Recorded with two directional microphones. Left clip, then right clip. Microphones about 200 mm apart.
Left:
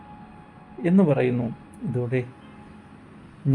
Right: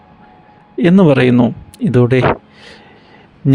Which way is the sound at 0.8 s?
45° right (ahead or behind).